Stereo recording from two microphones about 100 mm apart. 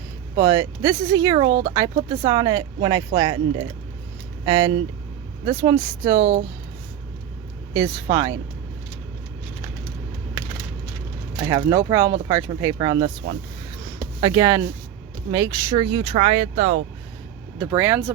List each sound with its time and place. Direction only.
0.3 s speech: 40° right (ahead or behind)
7.7 s speech: 35° right (ahead or behind)
11.5 s speech: 35° right (ahead or behind)
14.2 s speech: 45° right (ahead or behind)
14.4 s speech: 30° right (ahead or behind)
15.8 s speech: 55° right (ahead or behind); by 16.7 s 90° right
17.7 s speech: 20° right (ahead or behind)